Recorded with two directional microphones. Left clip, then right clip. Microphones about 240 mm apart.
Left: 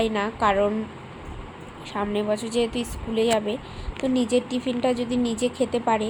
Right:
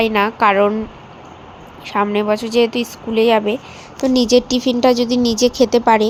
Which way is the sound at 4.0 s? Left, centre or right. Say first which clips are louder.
Right 10 dB; right.